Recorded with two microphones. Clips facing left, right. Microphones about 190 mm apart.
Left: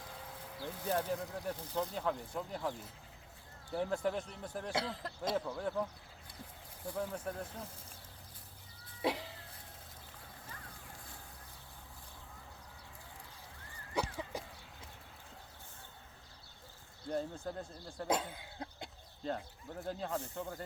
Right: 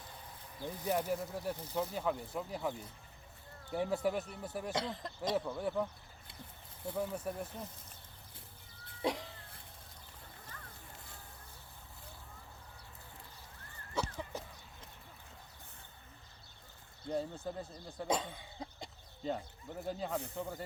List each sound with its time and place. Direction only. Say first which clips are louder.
0.6 s speech: right 1 dB; 10° right (ahead or behind)
3.8 s speech: right 2 dB; 5° right (ahead or behind)
6.9 s speech: right 1 dB; 10° right (ahead or behind)
9.0 s cough: even; 5° left (ahead or behind)
13.9 s a sound: left 1 dB; 10° left (ahead or behind)
17.1 s speech: even; 5° right (ahead or behind)
17.8 s speech: even; 20° right (ahead or behind)
18.1 s speech: left 1 dB; 5° left (ahead or behind)